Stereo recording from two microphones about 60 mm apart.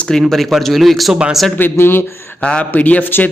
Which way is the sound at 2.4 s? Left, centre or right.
Centre.